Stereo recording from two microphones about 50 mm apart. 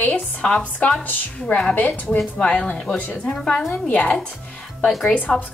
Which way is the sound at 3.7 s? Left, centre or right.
Left.